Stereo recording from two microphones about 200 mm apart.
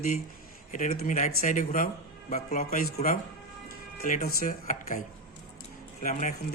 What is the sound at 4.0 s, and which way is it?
Speech, 45° left (ahead or behind).